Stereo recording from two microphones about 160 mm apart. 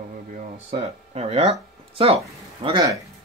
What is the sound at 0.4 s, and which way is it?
Speech, 40° right (ahead or behind).